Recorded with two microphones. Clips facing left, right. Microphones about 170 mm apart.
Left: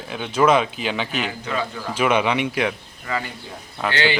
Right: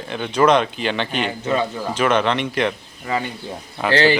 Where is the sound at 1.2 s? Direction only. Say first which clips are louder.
Right 5 dB; 25° right (ahead or behind).